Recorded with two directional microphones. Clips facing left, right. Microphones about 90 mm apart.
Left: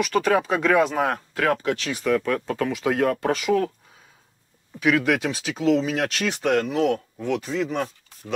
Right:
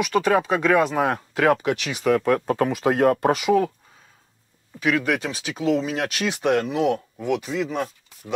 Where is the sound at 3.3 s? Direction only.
10° right (ahead or behind).